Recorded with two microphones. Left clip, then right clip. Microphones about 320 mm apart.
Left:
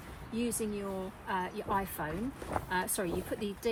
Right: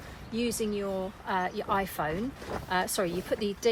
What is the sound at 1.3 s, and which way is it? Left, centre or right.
Speech, centre.